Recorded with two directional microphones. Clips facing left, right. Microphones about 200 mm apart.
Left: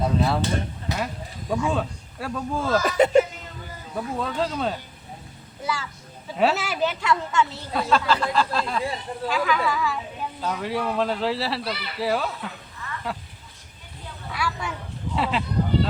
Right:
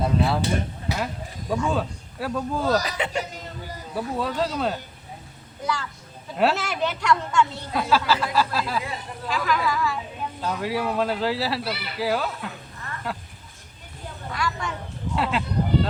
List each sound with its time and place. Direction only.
0.0 s a sound: centre (ahead or behind)
0.9 s speech: centre (ahead or behind)
2.8 s speech: 40° left (ahead or behind)
3.9 s a woman's voice: centre (ahead or behind)
14.3 s a sound: 5° left (ahead or behind)
15.1 s speech: centre (ahead or behind)